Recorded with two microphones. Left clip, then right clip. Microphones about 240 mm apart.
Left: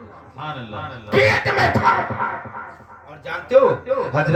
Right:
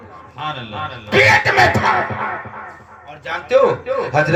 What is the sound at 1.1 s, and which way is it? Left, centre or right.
Speech, right.